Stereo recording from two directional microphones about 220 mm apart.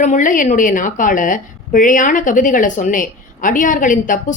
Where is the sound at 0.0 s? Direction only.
35° left (ahead or behind).